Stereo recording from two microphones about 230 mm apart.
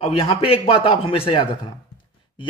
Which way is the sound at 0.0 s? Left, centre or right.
Left.